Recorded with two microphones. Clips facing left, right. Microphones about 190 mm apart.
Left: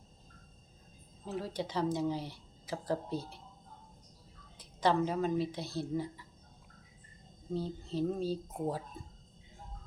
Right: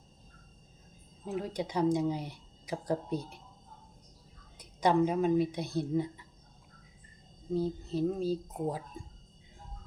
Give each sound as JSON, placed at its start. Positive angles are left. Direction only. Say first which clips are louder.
{"t": 1.2, "sound": "speech", "louder": "right 3 dB", "side_deg": -15}
{"t": 4.5, "sound": "speech", "louder": "right 3 dB", "side_deg": -15}
{"t": 7.5, "sound": "speech", "louder": "right 4 dB", "side_deg": -10}